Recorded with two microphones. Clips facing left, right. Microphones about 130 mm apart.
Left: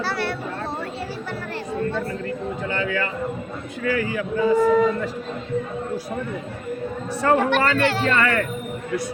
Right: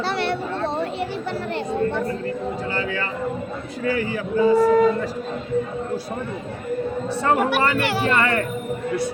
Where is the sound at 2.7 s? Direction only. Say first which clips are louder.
Left 1 dB; 30° right (ahead or behind).